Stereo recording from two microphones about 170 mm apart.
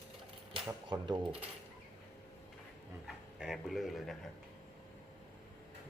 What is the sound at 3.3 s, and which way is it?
Speech, 5° right (ahead or behind).